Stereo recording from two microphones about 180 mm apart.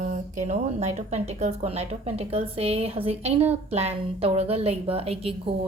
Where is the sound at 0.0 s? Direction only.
40° right (ahead or behind).